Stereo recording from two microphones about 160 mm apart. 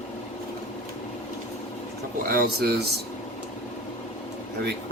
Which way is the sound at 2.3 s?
65° right (ahead or behind).